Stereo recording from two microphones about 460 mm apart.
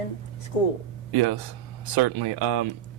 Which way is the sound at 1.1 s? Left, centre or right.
Right.